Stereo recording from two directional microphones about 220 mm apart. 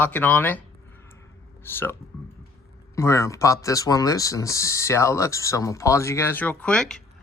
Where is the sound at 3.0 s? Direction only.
15° left (ahead or behind).